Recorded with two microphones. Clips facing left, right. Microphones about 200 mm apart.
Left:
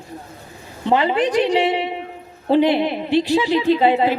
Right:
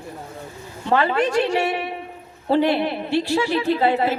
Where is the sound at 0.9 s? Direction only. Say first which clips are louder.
Left 2 dB; 20° left (ahead or behind).